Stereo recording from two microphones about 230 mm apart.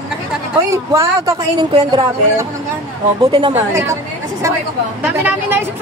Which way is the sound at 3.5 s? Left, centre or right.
Centre.